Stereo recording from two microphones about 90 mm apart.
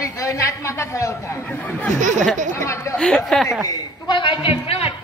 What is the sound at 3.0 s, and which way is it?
Speech, 10° left (ahead or behind).